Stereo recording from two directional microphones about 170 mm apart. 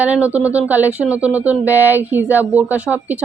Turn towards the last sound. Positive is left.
turn(degrees=-10)  # may be behind; listen again after turning